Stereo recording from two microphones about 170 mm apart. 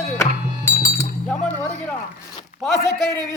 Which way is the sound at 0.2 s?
15° left (ahead or behind).